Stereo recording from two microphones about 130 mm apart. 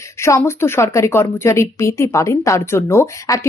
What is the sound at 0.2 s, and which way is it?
A woman's voice, 20° left (ahead or behind).